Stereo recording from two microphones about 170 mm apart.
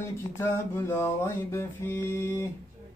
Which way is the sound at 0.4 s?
15° left (ahead or behind).